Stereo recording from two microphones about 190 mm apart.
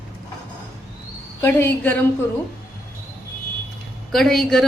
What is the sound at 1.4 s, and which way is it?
Speech, 10° left (ahead or behind).